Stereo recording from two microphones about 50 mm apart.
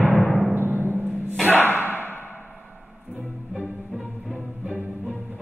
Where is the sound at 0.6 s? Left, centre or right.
Right.